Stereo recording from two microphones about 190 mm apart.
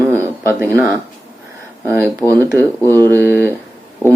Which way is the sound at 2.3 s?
15° right (ahead or behind).